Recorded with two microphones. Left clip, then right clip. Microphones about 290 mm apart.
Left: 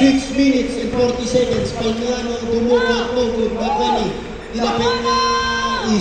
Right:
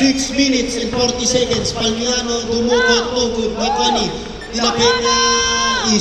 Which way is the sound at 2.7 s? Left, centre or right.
Right.